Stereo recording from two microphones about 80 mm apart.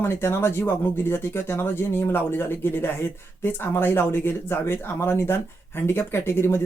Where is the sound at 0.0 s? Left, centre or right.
Left.